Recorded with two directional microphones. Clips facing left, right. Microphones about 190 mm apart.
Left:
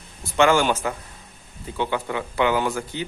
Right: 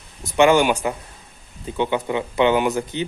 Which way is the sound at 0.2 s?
15° right (ahead or behind).